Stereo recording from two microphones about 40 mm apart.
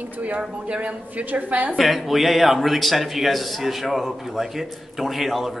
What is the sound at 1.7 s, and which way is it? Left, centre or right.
Speech, centre.